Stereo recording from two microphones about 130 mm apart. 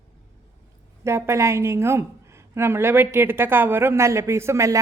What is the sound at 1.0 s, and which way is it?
A woman's voice, 20° right (ahead or behind).